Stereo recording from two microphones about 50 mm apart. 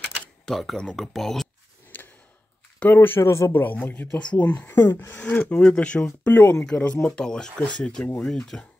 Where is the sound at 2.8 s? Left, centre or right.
Left.